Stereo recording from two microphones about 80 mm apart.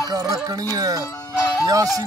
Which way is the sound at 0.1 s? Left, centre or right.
Right.